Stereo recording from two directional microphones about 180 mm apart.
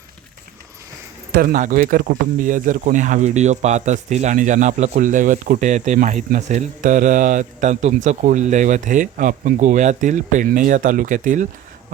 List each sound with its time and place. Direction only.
1.3 s speech: 50° right (ahead or behind)